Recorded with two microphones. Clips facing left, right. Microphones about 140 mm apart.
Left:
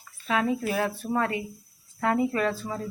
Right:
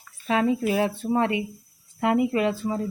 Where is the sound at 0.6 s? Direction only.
20° right (ahead or behind).